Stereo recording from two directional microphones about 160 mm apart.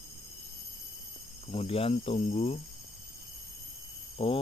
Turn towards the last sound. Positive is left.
turn(degrees=35)  # may be behind; listen again after turning